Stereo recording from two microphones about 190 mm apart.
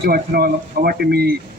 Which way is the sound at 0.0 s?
55° right (ahead or behind).